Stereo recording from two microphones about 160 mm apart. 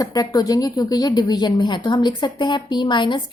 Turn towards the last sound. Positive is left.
turn(degrees=30)  # may be behind; listen again after turning